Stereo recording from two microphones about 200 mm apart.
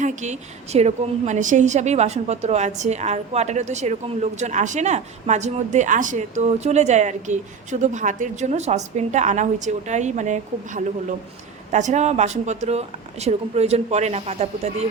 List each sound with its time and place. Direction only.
0.0 s a woman's voice: 35° right (ahead or behind)